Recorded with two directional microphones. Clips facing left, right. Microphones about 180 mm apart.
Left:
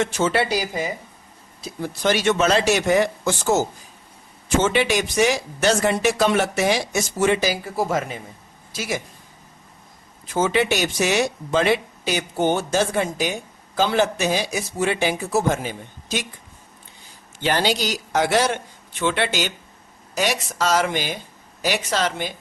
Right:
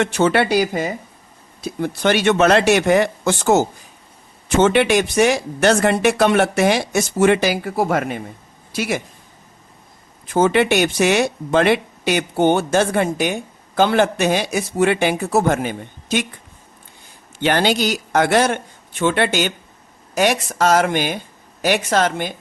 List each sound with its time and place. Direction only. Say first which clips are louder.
0.0 s speech: right 4 dB; 65° right (ahead or behind)
10.2 s speech: right 5 dB; 55° right (ahead or behind)